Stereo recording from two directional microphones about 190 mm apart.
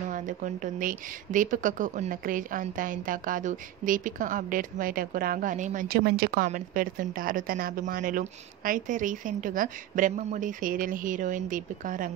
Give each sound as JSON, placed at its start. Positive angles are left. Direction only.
{"t": 0.1, "sound": "speech", "side_deg": -40}
{"t": 6.4, "sound": "speech", "side_deg": -45}